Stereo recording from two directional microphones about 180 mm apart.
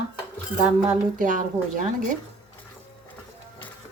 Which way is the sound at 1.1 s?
45° right (ahead or behind).